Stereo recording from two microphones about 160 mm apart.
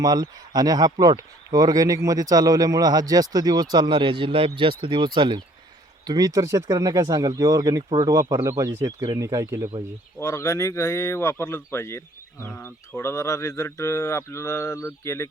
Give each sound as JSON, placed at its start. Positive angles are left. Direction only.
{"t": 0.0, "sound": "speech", "side_deg": -25}
{"t": 10.2, "sound": "speech", "side_deg": 20}